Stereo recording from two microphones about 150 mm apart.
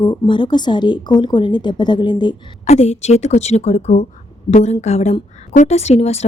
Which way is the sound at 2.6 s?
45° left (ahead or behind).